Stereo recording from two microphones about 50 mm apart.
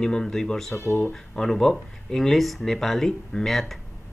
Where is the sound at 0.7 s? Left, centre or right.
Left.